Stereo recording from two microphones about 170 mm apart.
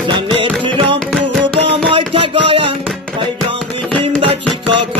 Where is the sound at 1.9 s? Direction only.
30° right (ahead or behind).